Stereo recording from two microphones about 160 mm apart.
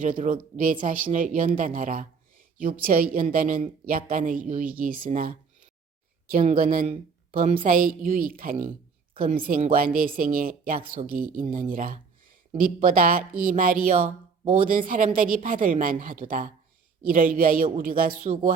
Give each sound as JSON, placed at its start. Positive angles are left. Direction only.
{"t": 0.0, "sound": "speech", "side_deg": -55}